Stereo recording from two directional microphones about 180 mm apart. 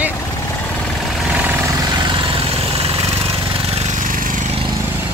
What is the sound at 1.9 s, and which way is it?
Vehicle, 25° right (ahead or behind).